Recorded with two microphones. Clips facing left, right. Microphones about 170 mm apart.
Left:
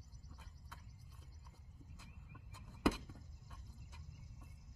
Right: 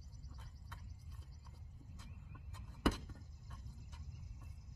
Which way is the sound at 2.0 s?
5° left (ahead or behind).